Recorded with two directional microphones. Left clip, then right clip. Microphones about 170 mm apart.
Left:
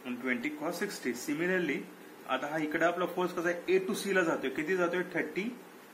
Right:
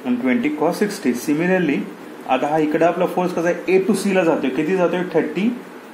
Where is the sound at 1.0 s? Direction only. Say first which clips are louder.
Right 13 dB; 30° right (ahead or behind).